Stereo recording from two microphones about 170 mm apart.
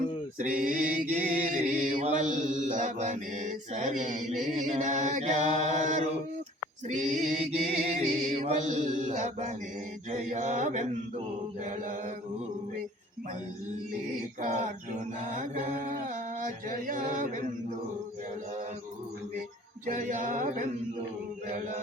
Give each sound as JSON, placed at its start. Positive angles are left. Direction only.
{"t": 0.3, "sound": "chant", "side_deg": -50}
{"t": 11.6, "sound": "mantra", "side_deg": -50}
{"t": 14.4, "sound": "chant", "side_deg": -45}
{"t": 16.0, "sound": "a sound", "side_deg": -50}
{"t": 19.8, "sound": "chant", "side_deg": -50}